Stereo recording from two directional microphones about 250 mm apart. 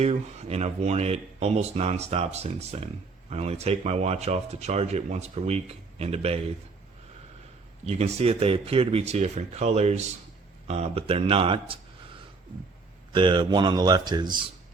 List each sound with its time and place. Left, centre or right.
0.0 s speech: right
7.9 s speech: right
13.1 s speech: centre